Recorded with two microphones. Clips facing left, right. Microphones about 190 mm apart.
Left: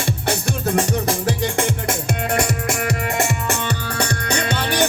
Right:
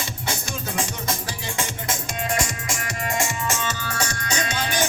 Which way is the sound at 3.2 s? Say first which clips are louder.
Left 4 dB; 60° left (ahead or behind).